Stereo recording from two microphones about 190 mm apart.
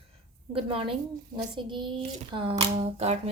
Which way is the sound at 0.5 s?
30° right (ahead or behind).